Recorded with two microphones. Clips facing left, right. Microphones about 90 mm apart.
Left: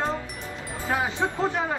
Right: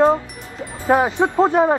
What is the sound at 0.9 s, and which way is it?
Speech, 45° right (ahead or behind).